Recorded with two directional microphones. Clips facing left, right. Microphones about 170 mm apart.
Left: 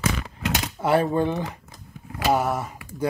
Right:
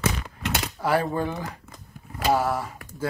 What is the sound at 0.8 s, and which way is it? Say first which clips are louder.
Speech: left 4 dB; 20° left (ahead or behind).